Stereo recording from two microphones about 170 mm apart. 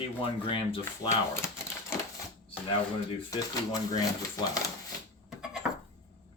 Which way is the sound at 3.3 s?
20° left (ahead or behind).